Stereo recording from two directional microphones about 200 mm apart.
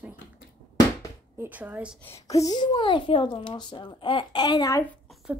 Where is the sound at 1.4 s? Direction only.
10° right (ahead or behind).